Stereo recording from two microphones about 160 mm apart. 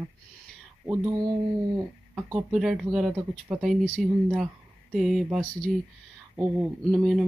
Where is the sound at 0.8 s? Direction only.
20° right (ahead or behind).